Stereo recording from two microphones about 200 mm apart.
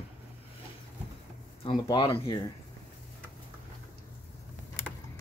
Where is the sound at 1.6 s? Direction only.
25° left (ahead or behind).